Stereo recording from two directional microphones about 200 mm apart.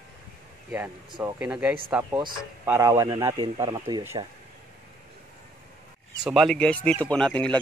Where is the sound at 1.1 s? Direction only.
20° right (ahead or behind).